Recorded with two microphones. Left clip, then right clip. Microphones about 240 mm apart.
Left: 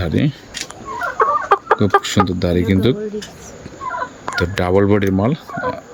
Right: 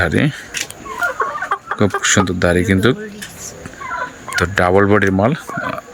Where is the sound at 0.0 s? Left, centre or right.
Centre.